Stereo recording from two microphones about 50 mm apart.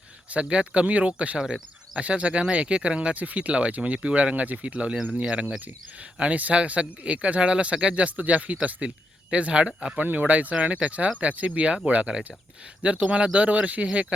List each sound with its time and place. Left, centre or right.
0.4 s speech: right
1.4 s speech: centre
2.0 s speech: right
10.0 s speech: right